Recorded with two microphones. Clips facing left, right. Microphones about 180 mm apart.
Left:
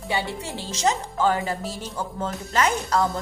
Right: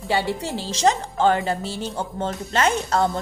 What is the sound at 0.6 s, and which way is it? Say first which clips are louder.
A woman's voice: right 3 dB; 30° right (ahead or behind).